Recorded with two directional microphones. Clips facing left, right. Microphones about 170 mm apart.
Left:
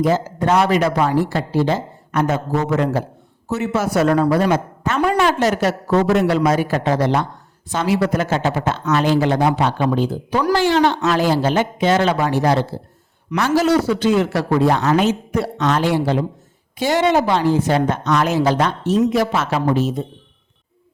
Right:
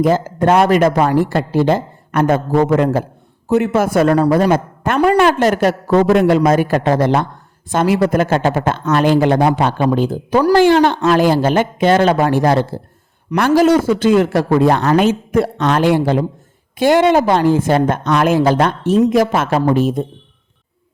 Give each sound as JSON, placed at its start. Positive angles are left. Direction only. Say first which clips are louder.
{"t": 0.0, "sound": "a woman's voice", "louder": "right 4 dB", "side_deg": -50}